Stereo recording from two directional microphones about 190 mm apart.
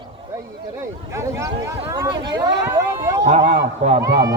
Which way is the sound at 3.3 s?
35° right (ahead or behind).